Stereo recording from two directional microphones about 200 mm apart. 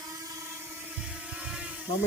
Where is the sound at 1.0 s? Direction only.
5° right (ahead or behind).